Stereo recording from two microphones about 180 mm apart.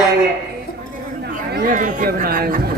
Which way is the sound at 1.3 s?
50° right (ahead or behind).